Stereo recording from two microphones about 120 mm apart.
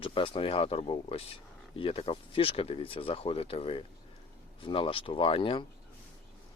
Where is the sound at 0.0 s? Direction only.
45° left (ahead or behind).